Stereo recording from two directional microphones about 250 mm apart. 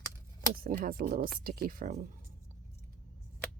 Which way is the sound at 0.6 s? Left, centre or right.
Right.